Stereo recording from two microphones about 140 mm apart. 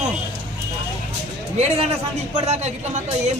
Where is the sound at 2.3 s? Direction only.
50° right (ahead or behind).